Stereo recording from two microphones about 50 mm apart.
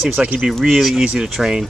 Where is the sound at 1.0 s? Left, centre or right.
Centre.